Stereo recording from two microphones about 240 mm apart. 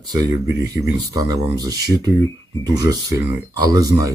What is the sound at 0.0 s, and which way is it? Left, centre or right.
Speech, centre.